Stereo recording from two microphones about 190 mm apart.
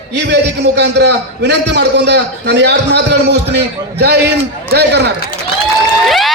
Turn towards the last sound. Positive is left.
turn(degrees=0)  # may be behind; listen again after turning